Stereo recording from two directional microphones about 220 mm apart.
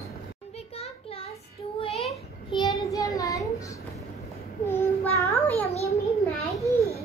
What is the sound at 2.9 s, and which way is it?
Child singing, 15° left (ahead or behind).